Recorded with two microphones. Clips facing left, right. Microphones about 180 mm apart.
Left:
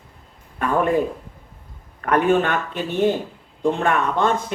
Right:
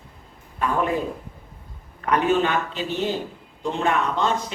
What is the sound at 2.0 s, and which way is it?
A man's voice, 55° left (ahead or behind).